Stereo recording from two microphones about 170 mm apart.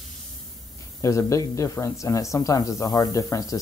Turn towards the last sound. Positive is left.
turn(degrees=20)  # may be behind; listen again after turning